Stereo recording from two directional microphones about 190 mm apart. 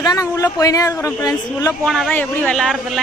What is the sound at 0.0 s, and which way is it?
Speech, 20° left (ahead or behind).